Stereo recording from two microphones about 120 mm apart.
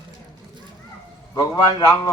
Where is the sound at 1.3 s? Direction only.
30° left (ahead or behind).